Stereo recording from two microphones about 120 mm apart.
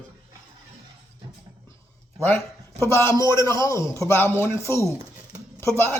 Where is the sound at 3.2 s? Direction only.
40° right (ahead or behind).